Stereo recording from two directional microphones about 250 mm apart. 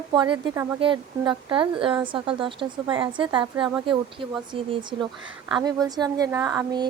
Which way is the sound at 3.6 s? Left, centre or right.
Centre.